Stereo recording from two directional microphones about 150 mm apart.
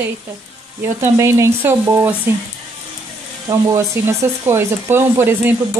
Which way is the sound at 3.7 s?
20° right (ahead or behind).